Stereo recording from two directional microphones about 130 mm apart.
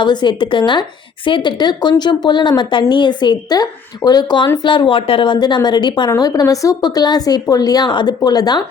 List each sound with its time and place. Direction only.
0.0 s a woman's voice: 35° left (ahead or behind)